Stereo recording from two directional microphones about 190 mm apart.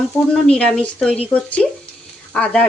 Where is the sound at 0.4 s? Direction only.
5° left (ahead or behind).